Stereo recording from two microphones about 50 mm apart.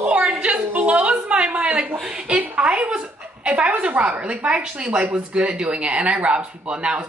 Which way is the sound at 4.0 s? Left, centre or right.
Right.